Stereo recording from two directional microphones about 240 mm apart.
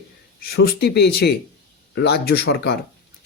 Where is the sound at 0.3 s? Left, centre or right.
Left.